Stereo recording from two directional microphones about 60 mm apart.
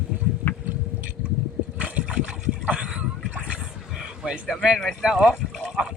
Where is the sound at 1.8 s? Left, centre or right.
Centre.